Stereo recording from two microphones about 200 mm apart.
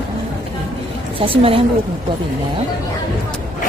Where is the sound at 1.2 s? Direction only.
30° right (ahead or behind).